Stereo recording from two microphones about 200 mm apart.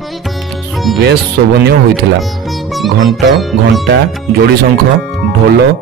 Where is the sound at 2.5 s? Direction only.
Centre (ahead or behind).